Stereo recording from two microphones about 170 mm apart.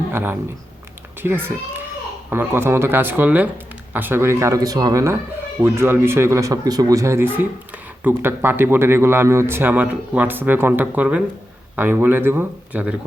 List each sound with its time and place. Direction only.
0.1 s speech: 10° right (ahead or behind)